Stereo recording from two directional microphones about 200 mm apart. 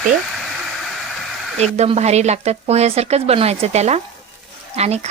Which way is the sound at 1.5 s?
35° right (ahead or behind).